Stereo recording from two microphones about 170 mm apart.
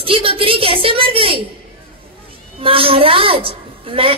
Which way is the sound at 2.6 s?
30° right (ahead or behind).